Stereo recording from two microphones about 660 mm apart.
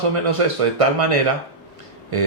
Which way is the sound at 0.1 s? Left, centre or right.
Right.